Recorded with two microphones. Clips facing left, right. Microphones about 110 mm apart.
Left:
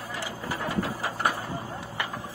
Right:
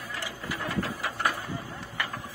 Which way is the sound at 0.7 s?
30° left (ahead or behind).